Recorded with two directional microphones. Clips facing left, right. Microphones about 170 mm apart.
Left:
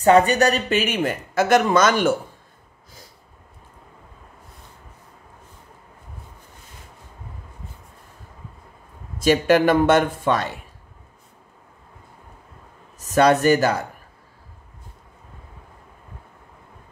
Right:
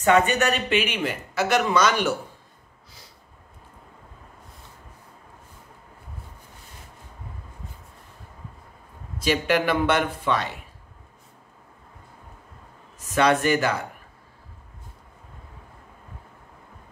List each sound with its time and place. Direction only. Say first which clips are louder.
0.0 s speech: left 4 dB; 35° left (ahead or behind)
9.2 s speech: left 6 dB; 45° left (ahead or behind)
13.0 s speech: left 5 dB; 40° left (ahead or behind)